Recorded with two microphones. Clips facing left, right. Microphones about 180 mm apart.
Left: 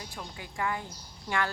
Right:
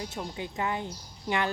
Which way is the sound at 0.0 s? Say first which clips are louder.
Right 7 dB; 25° right (ahead or behind).